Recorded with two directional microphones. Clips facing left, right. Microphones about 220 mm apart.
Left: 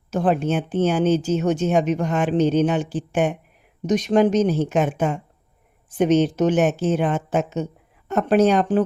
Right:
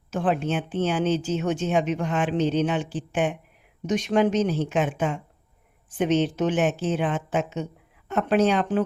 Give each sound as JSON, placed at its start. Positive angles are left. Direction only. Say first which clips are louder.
{"t": 0.1, "sound": "speech", "louder": "left 4 dB", "side_deg": 40}